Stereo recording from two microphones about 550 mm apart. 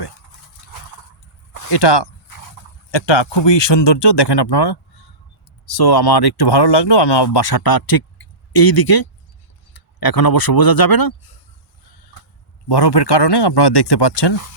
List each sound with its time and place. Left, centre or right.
1.7 s speech: left
2.6 s a sound: left
2.9 s speech: left
12.6 s speech: left